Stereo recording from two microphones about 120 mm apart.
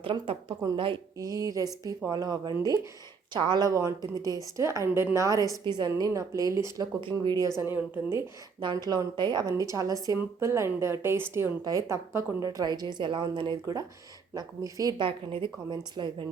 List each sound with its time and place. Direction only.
0.0 s a woman's voice: 45° right (ahead or behind)
1.2 s a woman's voice: 30° right (ahead or behind)
7.0 s a woman's voice: 40° right (ahead or behind)
7.4 s a woman's voice: 20° right (ahead or behind)
8.6 s a woman's voice: 35° right (ahead or behind)
11.6 s a woman's voice: 30° right (ahead or behind)
15.0 s a woman's voice: 45° right (ahead or behind)